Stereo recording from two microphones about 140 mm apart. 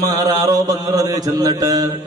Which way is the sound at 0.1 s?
25° right (ahead or behind).